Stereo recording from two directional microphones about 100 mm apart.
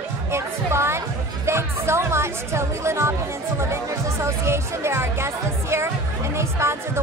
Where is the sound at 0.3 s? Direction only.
25° right (ahead or behind).